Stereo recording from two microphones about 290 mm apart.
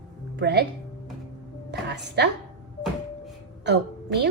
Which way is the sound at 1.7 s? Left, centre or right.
Right.